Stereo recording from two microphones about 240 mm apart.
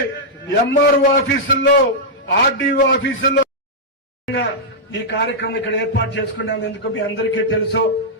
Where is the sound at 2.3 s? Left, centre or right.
Left.